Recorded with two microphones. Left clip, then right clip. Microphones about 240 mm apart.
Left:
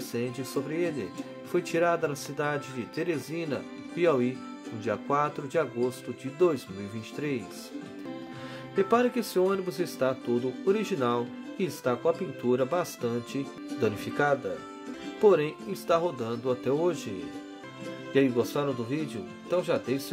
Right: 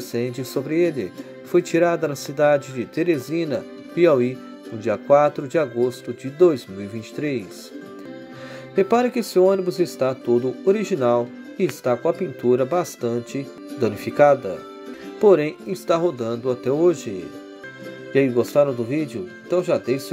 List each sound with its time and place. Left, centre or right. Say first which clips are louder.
0.1 s speech: right 7 dB; centre
8.7 s speech: right 6 dB; centre
18.1 s speech: right 8 dB; centre